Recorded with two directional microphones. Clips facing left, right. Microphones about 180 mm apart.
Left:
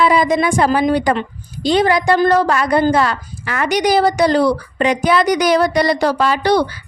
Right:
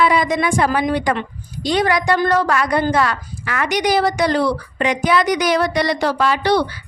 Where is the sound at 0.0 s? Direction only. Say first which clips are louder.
Left 3 dB; 35° left (ahead or behind).